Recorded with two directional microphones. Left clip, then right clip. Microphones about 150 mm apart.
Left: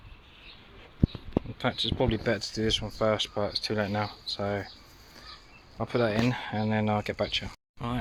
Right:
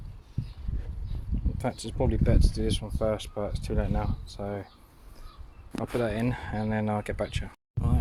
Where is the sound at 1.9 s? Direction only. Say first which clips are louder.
Left 1 dB; 10° right (ahead or behind).